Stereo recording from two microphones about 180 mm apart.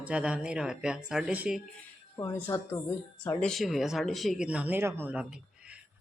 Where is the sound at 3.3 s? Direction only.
5° left (ahead or behind).